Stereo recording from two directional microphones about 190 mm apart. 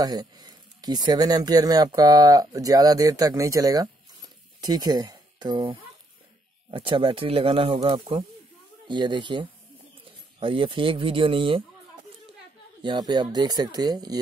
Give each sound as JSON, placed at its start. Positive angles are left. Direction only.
{"t": 0.0, "sound": "speech", "side_deg": -20}
{"t": 12.8, "sound": "speech", "side_deg": -25}